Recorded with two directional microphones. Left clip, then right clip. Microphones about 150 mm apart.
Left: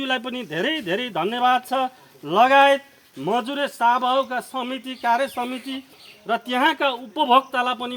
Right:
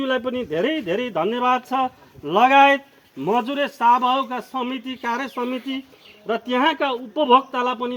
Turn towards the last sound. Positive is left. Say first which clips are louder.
# even
turn(degrees=30)  # may be behind; listen again after turning